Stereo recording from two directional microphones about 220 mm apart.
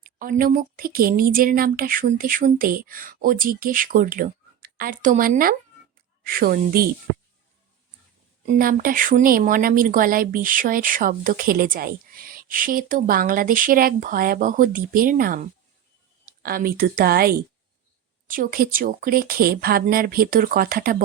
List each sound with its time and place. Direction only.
0.0 s speech: 40° right (ahead or behind)
8.4 s speech: 40° right (ahead or behind)